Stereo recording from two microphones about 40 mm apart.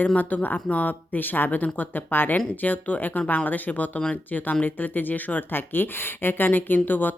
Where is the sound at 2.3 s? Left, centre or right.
Left.